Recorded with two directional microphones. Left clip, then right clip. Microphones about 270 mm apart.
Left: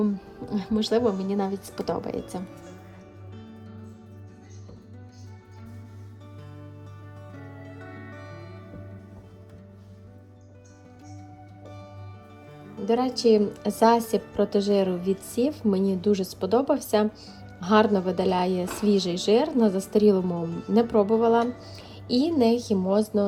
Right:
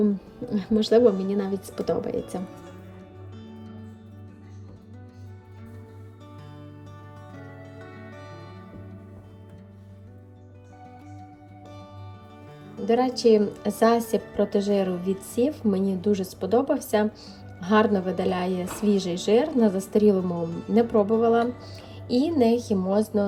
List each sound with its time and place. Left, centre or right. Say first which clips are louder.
0.0 s a woman's voice: right 3 dB; centre
3.3 s music: right 1 dB; centre
7.3 s music: even; centre
11.6 s music: even; centre
12.6 s a woman's voice: right 2 dB; centre